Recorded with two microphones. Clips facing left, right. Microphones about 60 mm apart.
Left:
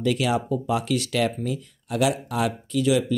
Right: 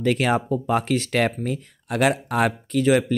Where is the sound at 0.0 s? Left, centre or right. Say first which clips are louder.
Right 2 dB; right.